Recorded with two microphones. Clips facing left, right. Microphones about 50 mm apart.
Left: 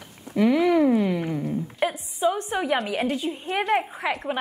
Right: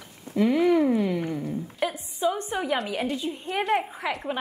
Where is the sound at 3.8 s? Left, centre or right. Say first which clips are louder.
Left 3 dB; centre.